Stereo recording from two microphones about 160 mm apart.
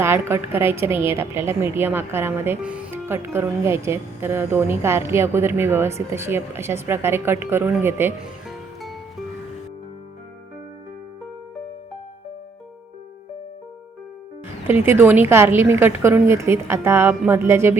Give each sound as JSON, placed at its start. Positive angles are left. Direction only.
{"t": 0.0, "sound": "a woman's voice", "side_deg": -15}
{"t": 8.4, "sound": "music", "side_deg": 0}
{"t": 14.7, "sound": "a woman's voice", "side_deg": -15}